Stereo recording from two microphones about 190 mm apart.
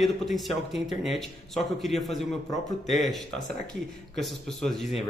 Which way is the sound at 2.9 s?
Centre (ahead or behind).